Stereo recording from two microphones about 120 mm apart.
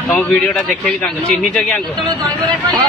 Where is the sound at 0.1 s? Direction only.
10° left (ahead or behind).